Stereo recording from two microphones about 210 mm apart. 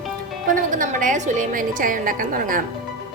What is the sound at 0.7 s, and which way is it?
A woman's voice, 40° right (ahead or behind).